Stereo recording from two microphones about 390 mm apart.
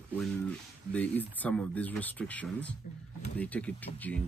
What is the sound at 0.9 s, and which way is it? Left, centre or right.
Speech, centre.